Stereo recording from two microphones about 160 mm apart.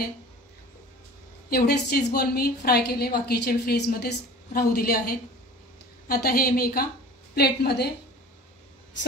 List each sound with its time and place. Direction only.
1.5 s a woman's voice: 85° left; by 6.9 s 70° left (ahead or behind)
7.3 s a woman's voice: 90° left